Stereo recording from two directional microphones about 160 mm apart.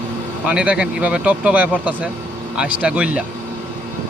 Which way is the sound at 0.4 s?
5° right (ahead or behind).